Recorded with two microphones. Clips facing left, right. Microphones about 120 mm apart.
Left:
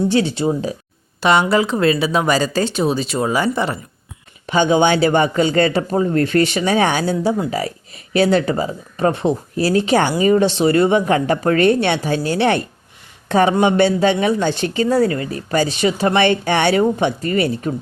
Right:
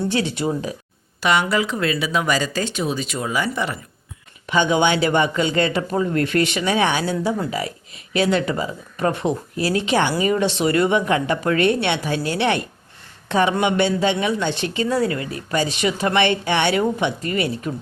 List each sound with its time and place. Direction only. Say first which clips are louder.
0.1 s speech: left 5 dB; 30° left (ahead or behind)